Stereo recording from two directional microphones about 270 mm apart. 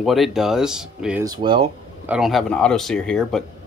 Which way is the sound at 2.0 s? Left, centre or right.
Centre.